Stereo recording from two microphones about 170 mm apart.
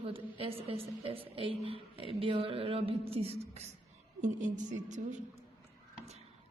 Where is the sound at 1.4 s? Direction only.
30° right (ahead or behind).